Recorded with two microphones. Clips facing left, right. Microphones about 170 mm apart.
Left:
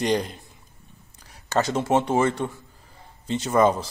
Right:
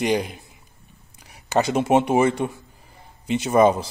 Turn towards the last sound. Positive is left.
turn(degrees=-15)  # may be behind; listen again after turning